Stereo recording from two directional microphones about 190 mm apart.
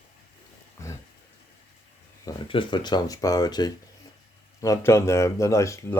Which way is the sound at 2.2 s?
25° left (ahead or behind).